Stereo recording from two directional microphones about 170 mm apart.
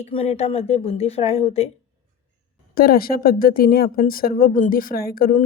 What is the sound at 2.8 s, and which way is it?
Speech, 60° left (ahead or behind).